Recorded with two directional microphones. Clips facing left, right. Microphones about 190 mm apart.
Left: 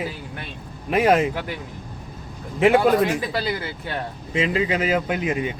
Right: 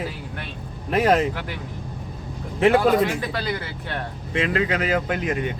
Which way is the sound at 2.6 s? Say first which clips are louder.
Left 1 dB; centre (ahead or behind).